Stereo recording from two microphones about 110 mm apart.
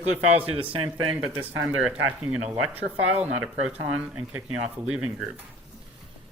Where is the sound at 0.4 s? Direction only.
55° right (ahead or behind).